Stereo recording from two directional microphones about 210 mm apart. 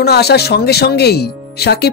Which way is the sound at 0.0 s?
50° left (ahead or behind).